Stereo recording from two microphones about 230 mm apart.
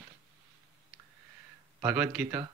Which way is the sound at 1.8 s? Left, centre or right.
Centre.